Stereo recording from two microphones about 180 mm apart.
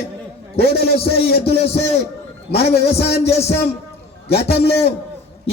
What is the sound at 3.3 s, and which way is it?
A man's voice, 35° left (ahead or behind).